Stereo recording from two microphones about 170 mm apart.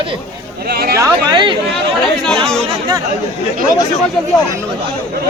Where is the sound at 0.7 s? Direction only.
65° right (ahead or behind).